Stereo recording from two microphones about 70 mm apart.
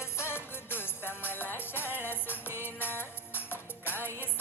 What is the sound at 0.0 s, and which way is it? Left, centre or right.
Music, left.